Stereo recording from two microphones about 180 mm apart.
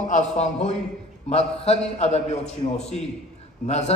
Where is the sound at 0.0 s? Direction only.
40° left (ahead or behind).